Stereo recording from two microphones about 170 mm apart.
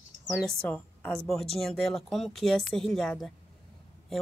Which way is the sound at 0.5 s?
5° left (ahead or behind).